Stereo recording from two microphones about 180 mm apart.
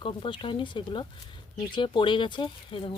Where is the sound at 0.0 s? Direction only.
30° left (ahead or behind).